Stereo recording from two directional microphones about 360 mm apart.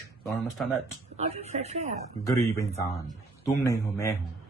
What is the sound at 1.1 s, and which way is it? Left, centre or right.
Speech, centre.